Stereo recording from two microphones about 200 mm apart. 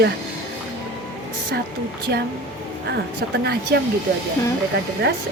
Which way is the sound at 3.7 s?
55° right (ahead or behind).